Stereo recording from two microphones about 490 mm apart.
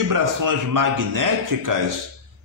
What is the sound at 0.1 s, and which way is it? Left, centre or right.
Speech, right.